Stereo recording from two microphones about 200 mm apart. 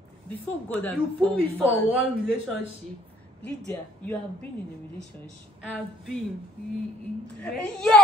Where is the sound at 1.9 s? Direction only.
10° right (ahead or behind).